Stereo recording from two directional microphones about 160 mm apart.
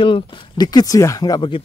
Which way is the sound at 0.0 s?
30° left (ahead or behind).